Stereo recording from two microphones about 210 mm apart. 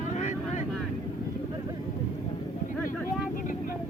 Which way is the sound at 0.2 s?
35° left (ahead or behind).